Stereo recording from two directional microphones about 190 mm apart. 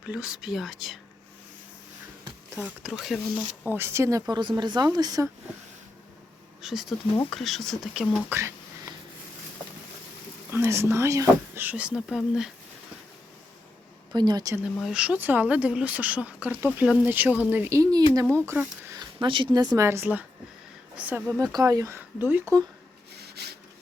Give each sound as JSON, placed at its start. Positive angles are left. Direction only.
{"t": 0.0, "sound": "speech", "side_deg": -5}
{"t": 2.6, "sound": "speech", "side_deg": -5}
{"t": 6.6, "sound": "speech", "side_deg": 0}
{"t": 8.3, "sound": "speech", "side_deg": -15}
{"t": 10.5, "sound": "speech", "side_deg": -15}
{"t": 14.1, "sound": "speech", "side_deg": -20}
{"t": 14.6, "sound": "speech", "side_deg": 0}
{"t": 23.1, "sound": "rub", "side_deg": -60}